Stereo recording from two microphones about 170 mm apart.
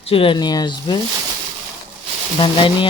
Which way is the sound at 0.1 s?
30° left (ahead or behind).